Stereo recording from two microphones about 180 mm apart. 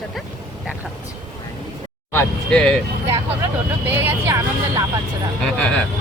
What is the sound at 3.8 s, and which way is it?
Speech, 10° right (ahead or behind).